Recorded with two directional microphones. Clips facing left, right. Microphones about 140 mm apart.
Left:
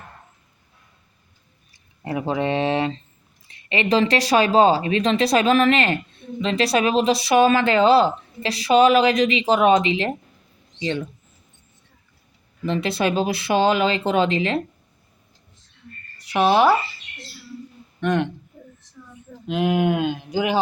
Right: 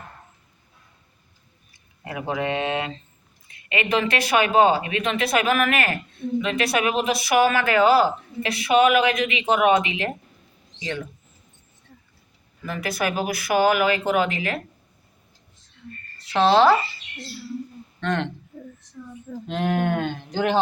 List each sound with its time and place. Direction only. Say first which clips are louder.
1.7 s speech: left 6 dB; 30° left (ahead or behind)
12.6 s speech: left 4 dB; 25° left (ahead or behind)
16.1 s speech: even; 15° left (ahead or behind)
18.0 s speech: left 4 dB; 15° left (ahead or behind)
19.5 s speech: left 3 dB; 10° left (ahead or behind)